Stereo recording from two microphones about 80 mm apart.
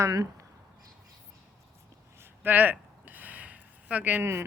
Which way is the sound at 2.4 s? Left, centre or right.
Right.